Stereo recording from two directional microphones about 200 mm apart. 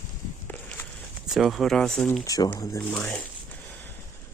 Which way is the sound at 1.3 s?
Centre (ahead or behind).